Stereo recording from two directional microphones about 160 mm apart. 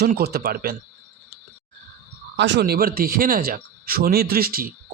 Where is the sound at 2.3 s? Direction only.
90° right.